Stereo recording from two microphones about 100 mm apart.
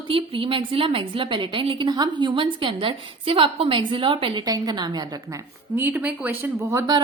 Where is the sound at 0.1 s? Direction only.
60° right (ahead or behind).